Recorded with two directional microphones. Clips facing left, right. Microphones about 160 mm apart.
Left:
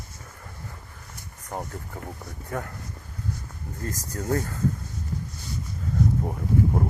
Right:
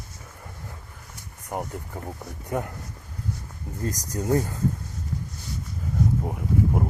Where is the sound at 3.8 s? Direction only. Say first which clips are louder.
Right 3 dB; 20° right (ahead or behind).